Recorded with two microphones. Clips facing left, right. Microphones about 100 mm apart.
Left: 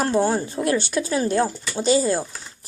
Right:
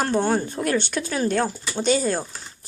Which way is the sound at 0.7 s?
40° left (ahead or behind).